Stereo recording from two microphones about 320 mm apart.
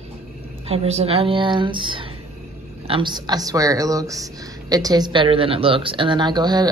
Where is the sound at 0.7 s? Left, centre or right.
Centre.